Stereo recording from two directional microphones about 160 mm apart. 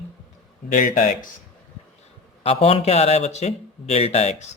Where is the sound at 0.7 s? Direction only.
65° left (ahead or behind).